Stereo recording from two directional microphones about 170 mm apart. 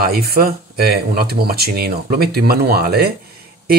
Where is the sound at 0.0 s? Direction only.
65° right (ahead or behind).